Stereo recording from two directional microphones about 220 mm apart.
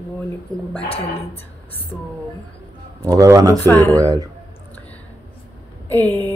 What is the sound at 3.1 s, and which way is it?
Speech, 15° right (ahead or behind).